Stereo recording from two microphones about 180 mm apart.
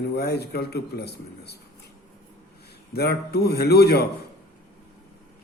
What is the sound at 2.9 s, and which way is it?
Speech, 60° left (ahead or behind).